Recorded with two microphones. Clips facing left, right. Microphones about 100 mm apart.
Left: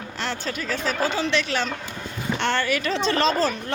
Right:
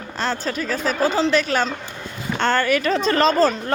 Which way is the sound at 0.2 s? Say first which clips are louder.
Right 5 dB; 35° right (ahead or behind).